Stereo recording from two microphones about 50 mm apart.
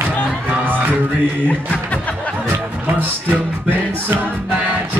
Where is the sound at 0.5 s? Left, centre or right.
Right.